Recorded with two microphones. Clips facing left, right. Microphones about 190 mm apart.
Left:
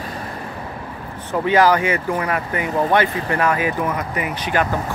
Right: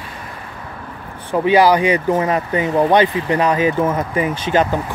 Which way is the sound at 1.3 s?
15° right (ahead or behind).